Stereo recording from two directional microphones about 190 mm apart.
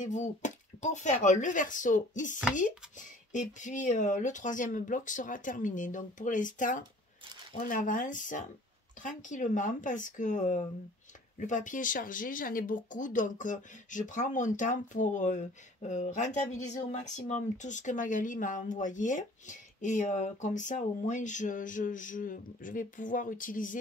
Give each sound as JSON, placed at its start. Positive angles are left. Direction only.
{"t": 0.0, "sound": "speech", "side_deg": 40}